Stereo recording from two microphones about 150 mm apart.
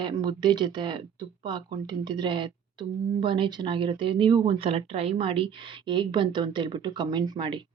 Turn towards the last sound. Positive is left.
turn(degrees=-30)  # may be behind; listen again after turning